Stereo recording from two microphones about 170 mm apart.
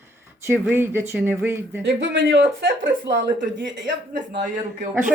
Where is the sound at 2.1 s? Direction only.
90° right.